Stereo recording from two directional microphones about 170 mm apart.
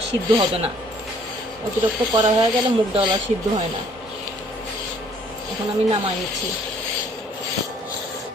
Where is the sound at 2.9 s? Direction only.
25° right (ahead or behind).